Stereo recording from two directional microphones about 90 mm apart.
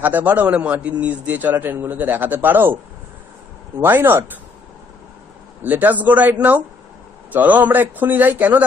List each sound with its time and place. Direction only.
0.0 s a man's voice: 20° right (ahead or behind)
3.8 s a man's voice: 25° right (ahead or behind)
5.6 s a man's voice: 20° right (ahead or behind)
7.3 s a man's voice: 20° right (ahead or behind)